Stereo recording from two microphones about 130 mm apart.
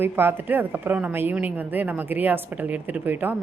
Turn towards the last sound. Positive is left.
turn(degrees=-15)  # may be behind; listen again after turning